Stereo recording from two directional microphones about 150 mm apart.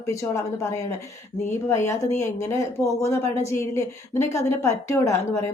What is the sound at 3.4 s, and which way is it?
A woman's voice, 20° left (ahead or behind).